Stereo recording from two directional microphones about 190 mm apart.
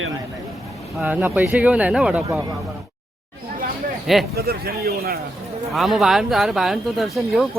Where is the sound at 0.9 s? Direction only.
10° right (ahead or behind).